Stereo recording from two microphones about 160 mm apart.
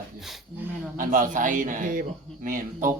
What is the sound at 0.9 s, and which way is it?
A man's voice, 55° right (ahead or behind).